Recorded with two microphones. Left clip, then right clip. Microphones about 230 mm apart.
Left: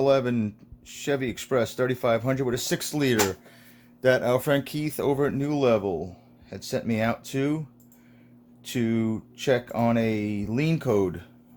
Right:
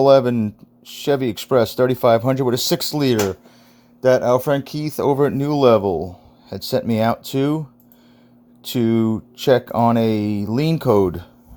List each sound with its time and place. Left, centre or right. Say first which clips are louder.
0.0 s speech: right 9 dB; right
8.6 s speech: right 8 dB; right